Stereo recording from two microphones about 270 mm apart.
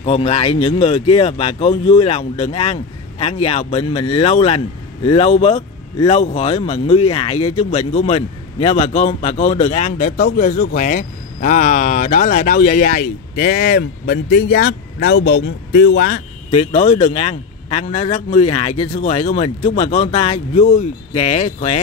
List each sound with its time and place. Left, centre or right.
0.0 s a man's voice: left
16.4 s a man's voice: left